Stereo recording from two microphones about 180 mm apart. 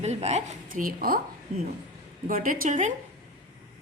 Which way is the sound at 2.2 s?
50° right (ahead or behind).